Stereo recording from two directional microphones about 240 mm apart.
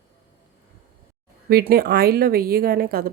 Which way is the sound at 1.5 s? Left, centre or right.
Right.